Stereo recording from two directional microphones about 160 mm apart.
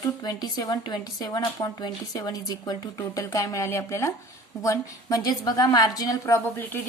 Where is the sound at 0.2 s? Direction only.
25° left (ahead or behind).